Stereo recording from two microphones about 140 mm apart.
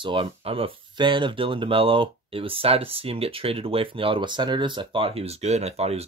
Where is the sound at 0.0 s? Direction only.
40° right (ahead or behind).